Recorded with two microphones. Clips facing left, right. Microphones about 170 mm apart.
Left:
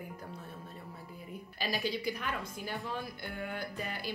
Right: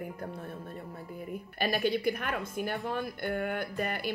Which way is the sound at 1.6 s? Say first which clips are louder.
Right 6 dB; 55° right (ahead or behind).